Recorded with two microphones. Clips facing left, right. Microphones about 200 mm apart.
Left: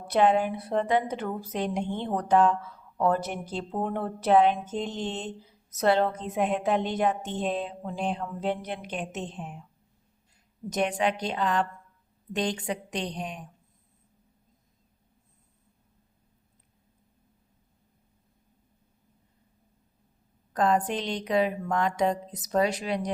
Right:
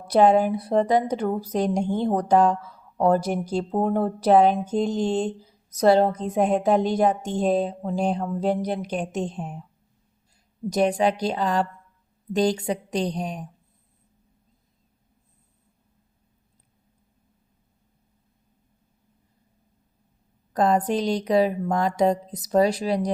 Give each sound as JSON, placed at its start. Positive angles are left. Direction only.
{"t": 0.1, "sound": "a woman's voice", "side_deg": -40}
{"t": 10.7, "sound": "a woman's voice", "side_deg": -35}
{"t": 20.5, "sound": "a woman's voice", "side_deg": -35}